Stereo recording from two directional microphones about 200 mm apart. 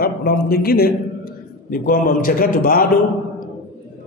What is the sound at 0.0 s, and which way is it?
A man's voice, 50° left (ahead or behind).